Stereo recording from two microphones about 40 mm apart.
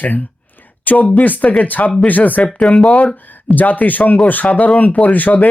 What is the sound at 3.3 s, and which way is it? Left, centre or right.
Speech, left.